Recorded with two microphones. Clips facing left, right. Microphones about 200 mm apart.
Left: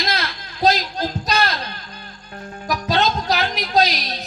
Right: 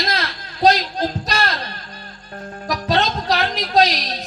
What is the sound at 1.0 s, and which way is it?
Music, 40° right (ahead or behind).